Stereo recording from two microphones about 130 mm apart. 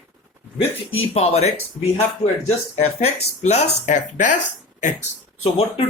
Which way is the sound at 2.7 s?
55° left (ahead or behind).